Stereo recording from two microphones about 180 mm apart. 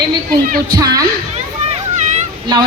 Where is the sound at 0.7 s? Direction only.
20° right (ahead or behind).